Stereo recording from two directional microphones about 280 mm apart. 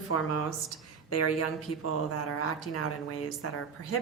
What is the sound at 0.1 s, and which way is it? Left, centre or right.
Speech, left.